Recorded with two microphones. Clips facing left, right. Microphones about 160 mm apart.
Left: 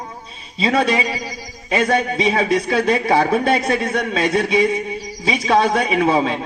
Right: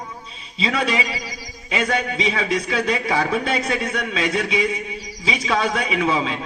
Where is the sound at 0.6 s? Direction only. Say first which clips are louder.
Left 5 dB; 45° left (ahead or behind).